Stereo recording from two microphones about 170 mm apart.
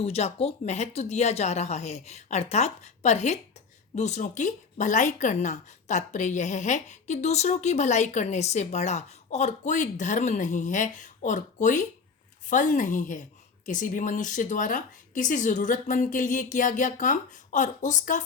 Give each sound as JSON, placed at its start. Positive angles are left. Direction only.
{"t": 0.0, "sound": "speech", "side_deg": 35}